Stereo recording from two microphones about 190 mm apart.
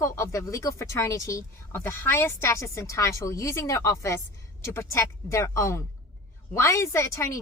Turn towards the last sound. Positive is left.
turn(degrees=15)  # may be behind; listen again after turning